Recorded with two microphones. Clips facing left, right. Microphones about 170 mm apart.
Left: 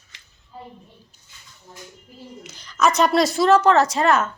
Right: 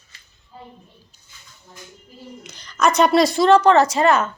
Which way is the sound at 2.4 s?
5° left (ahead or behind).